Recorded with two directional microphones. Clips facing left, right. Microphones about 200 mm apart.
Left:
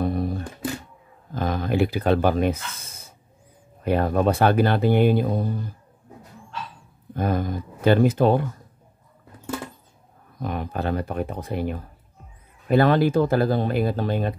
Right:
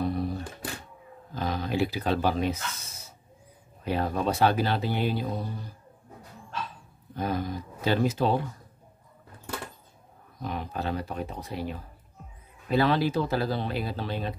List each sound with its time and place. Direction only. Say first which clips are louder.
0.0 s music: left 4 dB; 50° left (ahead or behind)
1.3 s speech: left 5 dB; 50° left (ahead or behind)
7.2 s speech: left 5 dB; 50° left (ahead or behind)
10.4 s speech: left 5 dB; 55° left (ahead or behind)